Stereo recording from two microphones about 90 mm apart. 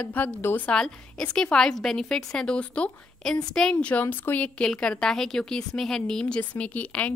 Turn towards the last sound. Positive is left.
turn(degrees=15)  # may be behind; listen again after turning